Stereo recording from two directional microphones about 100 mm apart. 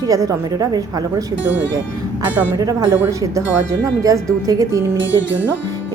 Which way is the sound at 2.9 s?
30° right (ahead or behind).